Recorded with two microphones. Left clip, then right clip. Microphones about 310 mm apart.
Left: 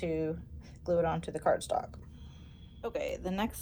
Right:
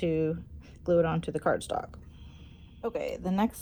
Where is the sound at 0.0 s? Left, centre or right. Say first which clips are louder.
Right 5 dB; right.